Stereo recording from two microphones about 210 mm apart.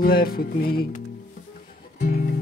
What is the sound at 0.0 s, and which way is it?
Music, 45° left (ahead or behind).